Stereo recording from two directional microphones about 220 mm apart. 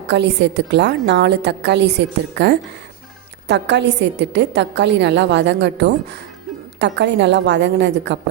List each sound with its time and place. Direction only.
0.1 s a woman's voice: 50° right (ahead or behind)